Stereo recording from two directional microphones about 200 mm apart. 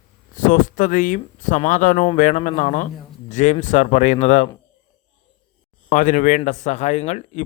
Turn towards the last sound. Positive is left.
turn(degrees=35)  # may be behind; listen again after turning